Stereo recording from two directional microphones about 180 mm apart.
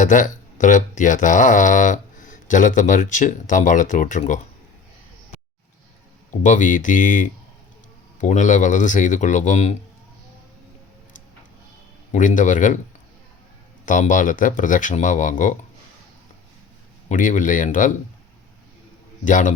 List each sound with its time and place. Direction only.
0.0 s speech: 45° left (ahead or behind)
6.4 s speech: 45° left (ahead or behind)
12.1 s speech: 45° left (ahead or behind)
13.8 s speech: 45° left (ahead or behind)
17.1 s speech: 45° left (ahead or behind)
19.2 s speech: 45° left (ahead or behind)